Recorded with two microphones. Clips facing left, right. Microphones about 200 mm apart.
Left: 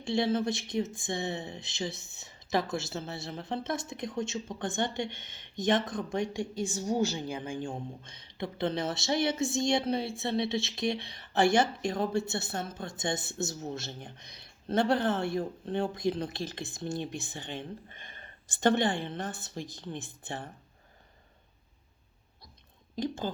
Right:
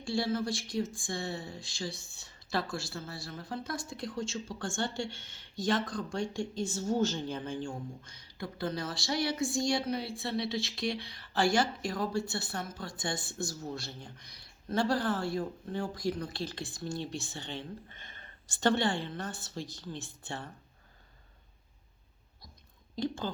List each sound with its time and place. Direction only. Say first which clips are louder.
0.0 s speech: left 3 dB; 20° left (ahead or behind)
17.9 s a sound: left 2 dB; 15° left (ahead or behind)
18.6 s speech: left 2 dB; 20° left (ahead or behind)
23.0 s speech: left 1 dB; 20° left (ahead or behind)